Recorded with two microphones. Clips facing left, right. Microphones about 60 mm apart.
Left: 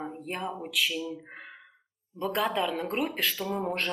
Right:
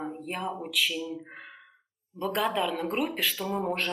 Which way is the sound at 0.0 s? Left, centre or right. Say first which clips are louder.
Right 1 dB; centre.